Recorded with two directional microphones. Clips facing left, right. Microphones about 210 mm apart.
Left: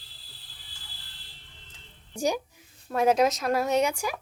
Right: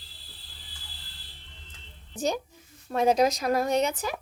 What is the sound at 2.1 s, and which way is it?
Speech, 10° left (ahead or behind).